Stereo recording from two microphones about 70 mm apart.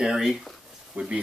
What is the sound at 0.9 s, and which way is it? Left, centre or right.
Speech, right.